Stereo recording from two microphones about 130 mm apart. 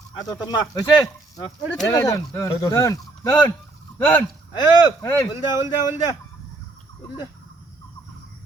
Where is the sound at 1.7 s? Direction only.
15° left (ahead or behind).